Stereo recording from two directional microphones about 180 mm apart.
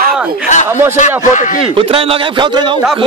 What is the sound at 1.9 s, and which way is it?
Speech, 30° right (ahead or behind).